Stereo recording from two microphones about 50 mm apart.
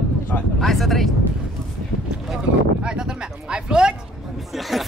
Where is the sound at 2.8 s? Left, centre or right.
Centre.